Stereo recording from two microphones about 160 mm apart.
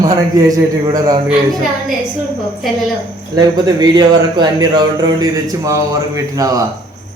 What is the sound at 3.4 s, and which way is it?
Speech, 25° right (ahead or behind).